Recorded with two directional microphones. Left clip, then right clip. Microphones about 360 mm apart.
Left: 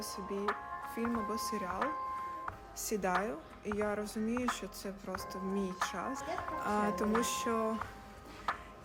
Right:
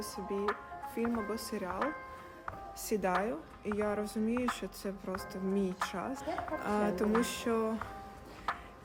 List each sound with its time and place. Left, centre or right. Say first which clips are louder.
0.0 s speech: right 2 dB; centre
8.5 s music: even; centre